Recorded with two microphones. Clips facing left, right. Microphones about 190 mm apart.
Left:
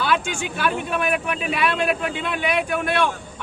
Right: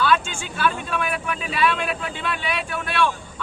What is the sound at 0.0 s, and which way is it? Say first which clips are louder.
A man's voice: right 1 dB; 15° left (ahead or behind).